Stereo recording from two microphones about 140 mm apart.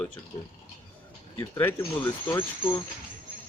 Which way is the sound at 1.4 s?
15° left (ahead or behind).